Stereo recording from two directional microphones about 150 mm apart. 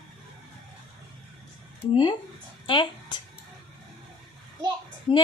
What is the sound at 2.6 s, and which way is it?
Speech, 35° left (ahead or behind).